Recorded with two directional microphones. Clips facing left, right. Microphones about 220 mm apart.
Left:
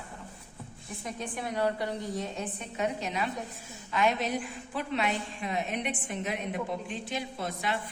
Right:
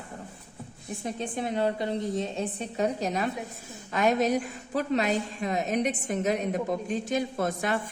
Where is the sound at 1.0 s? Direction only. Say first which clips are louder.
Right 5 dB; 25° right (ahead or behind).